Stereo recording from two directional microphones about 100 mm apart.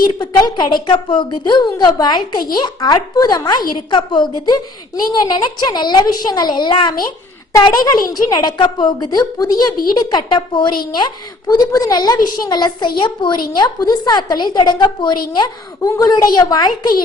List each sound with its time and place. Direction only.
0.2 s a woman's voice: 45° left (ahead or behind)